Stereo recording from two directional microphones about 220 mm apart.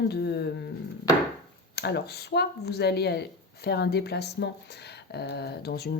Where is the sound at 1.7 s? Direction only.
45° left (ahead or behind).